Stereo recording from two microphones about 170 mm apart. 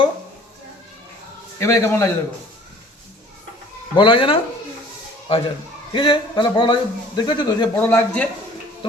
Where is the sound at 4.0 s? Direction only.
30° left (ahead or behind).